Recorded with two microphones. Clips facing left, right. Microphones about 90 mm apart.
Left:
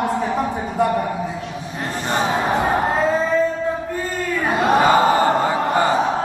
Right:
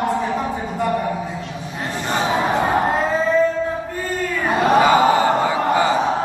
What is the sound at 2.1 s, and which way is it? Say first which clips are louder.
Music: even; centre (ahead or behind).